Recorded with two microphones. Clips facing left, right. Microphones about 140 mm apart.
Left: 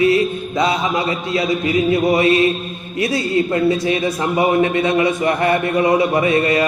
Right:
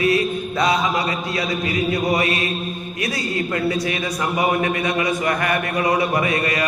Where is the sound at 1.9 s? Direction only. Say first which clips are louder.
Left 7 dB; 25° left (ahead or behind).